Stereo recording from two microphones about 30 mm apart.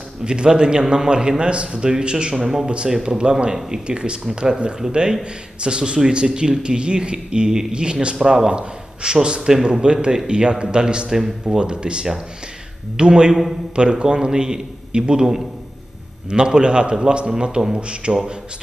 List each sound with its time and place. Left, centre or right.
0.3 s a man's voice: right
2.9 s a man's voice: right
8.4 s speech: right
9.5 s a man's voice: centre
9.8 s a man's voice: right
15.2 s a man's voice: centre
16.3 s a man's voice: right